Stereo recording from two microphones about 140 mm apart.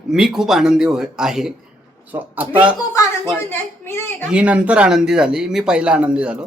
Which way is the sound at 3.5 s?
15° left (ahead or behind).